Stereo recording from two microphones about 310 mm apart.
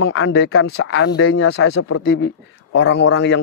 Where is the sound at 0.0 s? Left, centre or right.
Left.